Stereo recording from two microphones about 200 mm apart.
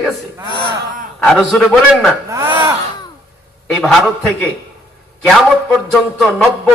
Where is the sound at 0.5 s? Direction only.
25° left (ahead or behind).